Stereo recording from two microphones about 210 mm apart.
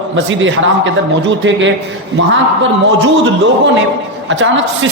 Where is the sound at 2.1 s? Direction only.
60° right (ahead or behind).